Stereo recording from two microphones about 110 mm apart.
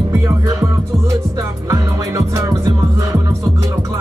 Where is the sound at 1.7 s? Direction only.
25° right (ahead or behind).